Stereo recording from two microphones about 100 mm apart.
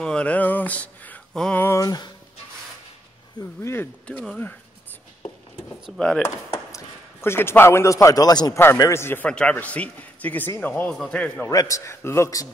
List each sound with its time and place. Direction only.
0.0 s a sound: 10° left (ahead or behind)
1.6 s a sound: 30° left (ahead or behind)
3.6 s a sound: 25° left (ahead or behind)
5.9 s a man's voice: 10° left (ahead or behind)
6.2 s speech: 25° left (ahead or behind)
8.7 s a man's voice: 30° left (ahead or behind)
9.3 s a man's voice: 10° left (ahead or behind)
10.9 s a man's voice: 10° left (ahead or behind)
11.4 s a man's voice: 30° left (ahead or behind)